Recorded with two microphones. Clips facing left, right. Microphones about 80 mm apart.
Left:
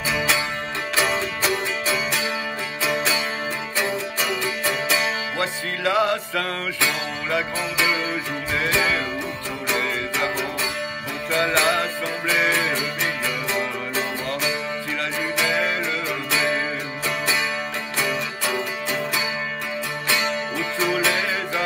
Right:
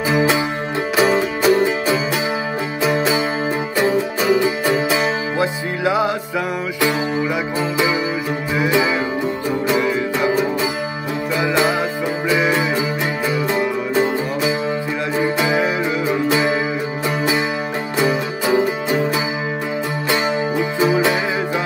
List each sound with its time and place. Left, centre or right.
0.1 s music: right
17.9 s music: right